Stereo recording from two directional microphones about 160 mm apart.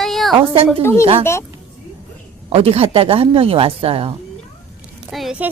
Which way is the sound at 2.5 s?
35° right (ahead or behind).